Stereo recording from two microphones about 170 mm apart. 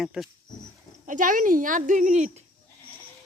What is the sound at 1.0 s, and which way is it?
Speech, 50° right (ahead or behind).